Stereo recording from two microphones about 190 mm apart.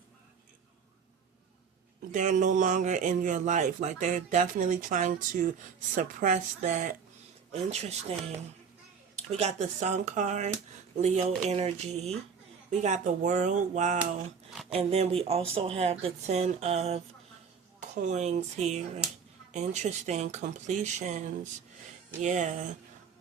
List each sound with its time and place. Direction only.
2.1 s speech: 40° right (ahead or behind)
9.3 s speech: 35° right (ahead or behind)
22.2 s speech: 40° right (ahead or behind)